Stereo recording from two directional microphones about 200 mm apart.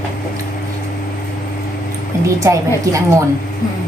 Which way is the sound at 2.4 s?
15° right (ahead or behind).